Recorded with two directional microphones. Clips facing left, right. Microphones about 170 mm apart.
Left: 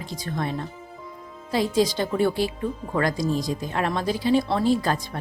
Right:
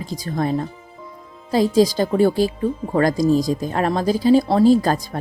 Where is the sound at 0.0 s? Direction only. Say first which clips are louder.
Right 6 dB; 40° right (ahead or behind).